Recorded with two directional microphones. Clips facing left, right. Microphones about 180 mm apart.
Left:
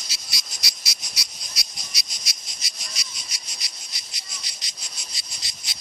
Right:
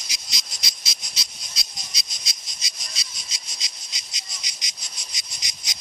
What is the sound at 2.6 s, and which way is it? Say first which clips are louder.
Insect: left 1 dB; 20° right (ahead or behind).